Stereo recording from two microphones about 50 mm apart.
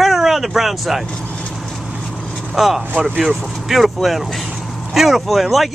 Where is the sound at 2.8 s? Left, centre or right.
Right.